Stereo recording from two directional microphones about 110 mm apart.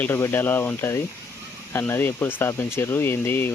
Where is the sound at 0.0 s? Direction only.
20° left (ahead or behind).